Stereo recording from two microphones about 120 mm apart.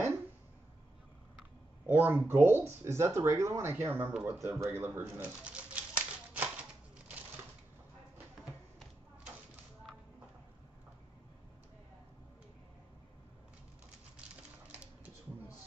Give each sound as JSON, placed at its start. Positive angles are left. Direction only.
{"t": 1.9, "sound": "speech", "side_deg": -15}
{"t": 4.6, "sound": "typewriter", "side_deg": -20}